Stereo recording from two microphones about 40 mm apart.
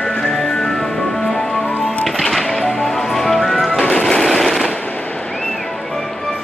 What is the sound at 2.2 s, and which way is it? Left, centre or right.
Music, centre.